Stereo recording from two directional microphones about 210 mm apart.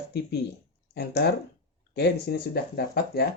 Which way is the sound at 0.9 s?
50° left (ahead or behind).